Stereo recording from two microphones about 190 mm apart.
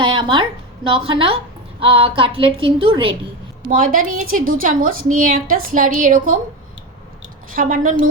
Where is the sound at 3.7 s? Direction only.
45° right (ahead or behind).